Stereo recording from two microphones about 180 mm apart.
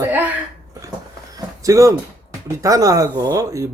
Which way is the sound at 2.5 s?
20° right (ahead or behind).